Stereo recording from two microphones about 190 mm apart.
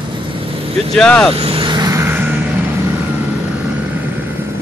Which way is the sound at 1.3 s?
30° right (ahead or behind).